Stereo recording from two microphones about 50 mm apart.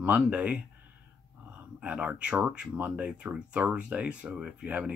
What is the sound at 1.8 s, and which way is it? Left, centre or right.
Speech, right.